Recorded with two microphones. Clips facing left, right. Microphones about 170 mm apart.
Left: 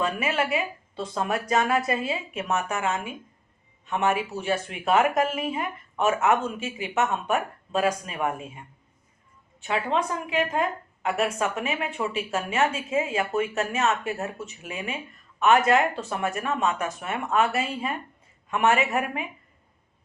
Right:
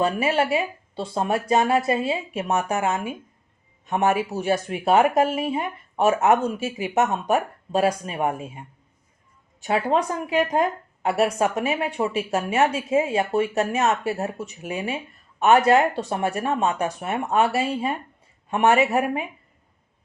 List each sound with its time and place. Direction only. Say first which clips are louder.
0.0 s a woman's voice: right 5 dB; 35° right (ahead or behind)